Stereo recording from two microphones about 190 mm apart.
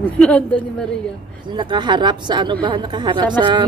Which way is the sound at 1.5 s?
25° right (ahead or behind).